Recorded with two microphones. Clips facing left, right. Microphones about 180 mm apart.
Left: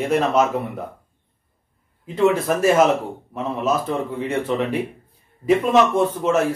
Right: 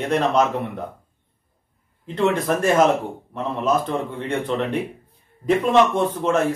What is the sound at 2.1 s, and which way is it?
A man's voice, 5° left (ahead or behind).